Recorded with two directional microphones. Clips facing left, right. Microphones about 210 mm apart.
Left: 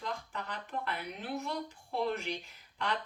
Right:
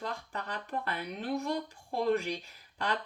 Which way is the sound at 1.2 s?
40° right (ahead or behind).